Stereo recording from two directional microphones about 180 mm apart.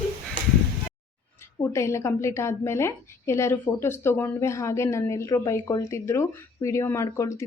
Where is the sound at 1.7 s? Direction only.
15° left (ahead or behind).